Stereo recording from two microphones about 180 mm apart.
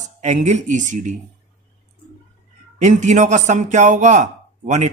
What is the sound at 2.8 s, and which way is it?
A man's voice, 40° right (ahead or behind).